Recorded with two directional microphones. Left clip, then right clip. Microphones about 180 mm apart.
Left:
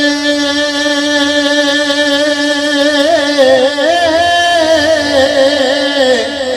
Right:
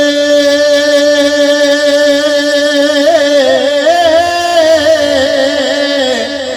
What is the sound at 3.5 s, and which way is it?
Music, 35° right (ahead or behind).